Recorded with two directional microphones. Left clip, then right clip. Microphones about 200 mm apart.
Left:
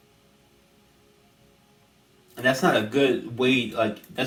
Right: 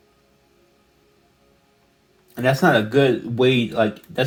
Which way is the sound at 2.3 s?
45° right (ahead or behind).